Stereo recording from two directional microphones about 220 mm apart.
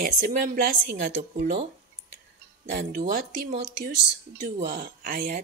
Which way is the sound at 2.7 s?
35° right (ahead or behind).